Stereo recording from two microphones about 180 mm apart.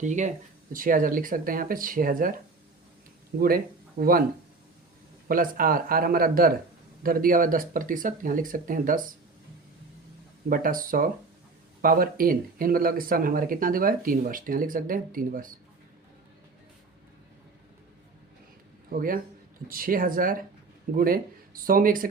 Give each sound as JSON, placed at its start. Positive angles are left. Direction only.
{"t": 0.0, "sound": "speech", "side_deg": -40}
{"t": 3.4, "sound": "speech", "side_deg": -55}
{"t": 5.3, "sound": "speech", "side_deg": -50}
{"t": 10.5, "sound": "speech", "side_deg": -50}
{"t": 18.9, "sound": "speech", "side_deg": -50}